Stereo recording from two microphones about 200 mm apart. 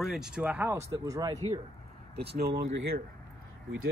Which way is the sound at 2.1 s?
55° right (ahead or behind).